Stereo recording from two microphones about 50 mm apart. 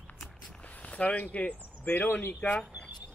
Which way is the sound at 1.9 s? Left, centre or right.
Left.